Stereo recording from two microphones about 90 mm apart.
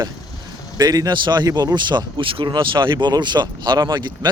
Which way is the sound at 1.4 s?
45° right (ahead or behind).